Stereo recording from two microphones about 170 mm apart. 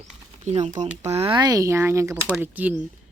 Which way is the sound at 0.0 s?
40° right (ahead or behind).